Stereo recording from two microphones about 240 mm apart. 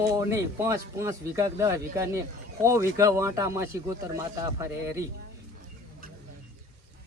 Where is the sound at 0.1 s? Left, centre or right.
Centre.